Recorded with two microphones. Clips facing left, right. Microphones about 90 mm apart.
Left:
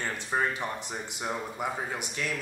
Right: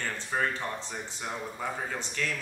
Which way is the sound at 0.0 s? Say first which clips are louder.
Left 1 dB; 15° left (ahead or behind).